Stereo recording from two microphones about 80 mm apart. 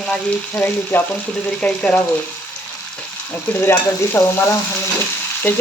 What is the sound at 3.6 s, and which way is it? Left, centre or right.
Stir, left.